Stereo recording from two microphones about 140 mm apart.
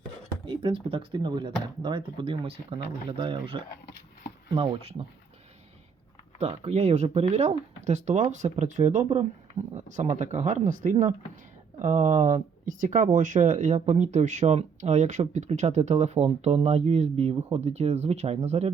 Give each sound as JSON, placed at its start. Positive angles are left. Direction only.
{"t": 0.4, "sound": "speech", "side_deg": -35}
{"t": 6.4, "sound": "speech", "side_deg": -50}